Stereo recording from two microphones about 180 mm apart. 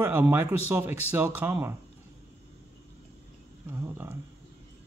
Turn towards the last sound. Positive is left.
turn(degrees=-15)  # may be behind; listen again after turning